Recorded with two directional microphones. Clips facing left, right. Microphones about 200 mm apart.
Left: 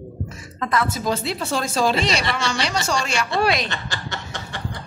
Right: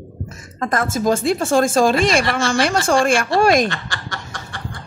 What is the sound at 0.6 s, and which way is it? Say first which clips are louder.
A woman's voice: right 3 dB; 45° right (ahead or behind).